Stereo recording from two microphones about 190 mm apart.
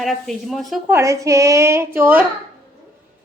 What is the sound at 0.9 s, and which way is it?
A woman's voice, 15° right (ahead or behind).